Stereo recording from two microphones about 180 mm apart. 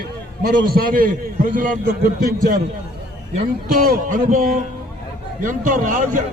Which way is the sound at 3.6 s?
50° right (ahead or behind).